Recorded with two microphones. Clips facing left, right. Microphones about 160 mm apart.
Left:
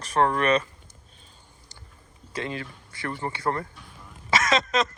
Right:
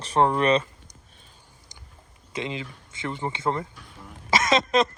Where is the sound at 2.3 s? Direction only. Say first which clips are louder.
Right 1 dB; 20° right (ahead or behind).